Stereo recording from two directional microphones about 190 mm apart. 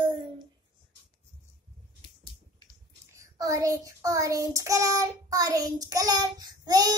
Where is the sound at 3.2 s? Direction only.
15° right (ahead or behind).